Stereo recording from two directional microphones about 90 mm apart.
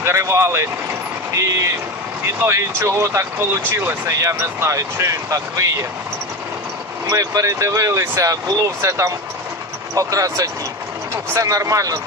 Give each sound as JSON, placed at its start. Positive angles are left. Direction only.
{"t": 0.0, "sound": "speech", "side_deg": -35}
{"t": 7.1, "sound": "speech", "side_deg": -40}